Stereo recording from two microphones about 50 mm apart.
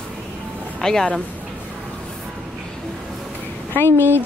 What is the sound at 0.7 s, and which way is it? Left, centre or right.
Speech, centre.